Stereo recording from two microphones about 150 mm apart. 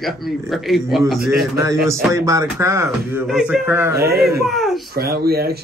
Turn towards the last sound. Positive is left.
turn(degrees=-90)